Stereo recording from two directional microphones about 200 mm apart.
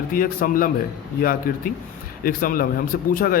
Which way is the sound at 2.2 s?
45° left (ahead or behind).